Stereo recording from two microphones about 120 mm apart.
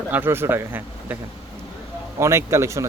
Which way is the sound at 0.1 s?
20° right (ahead or behind).